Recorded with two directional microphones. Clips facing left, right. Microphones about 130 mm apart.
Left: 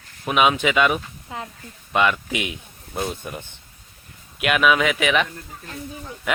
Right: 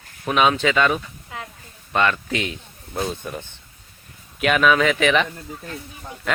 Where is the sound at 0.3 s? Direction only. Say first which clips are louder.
Even; 10° left (ahead or behind).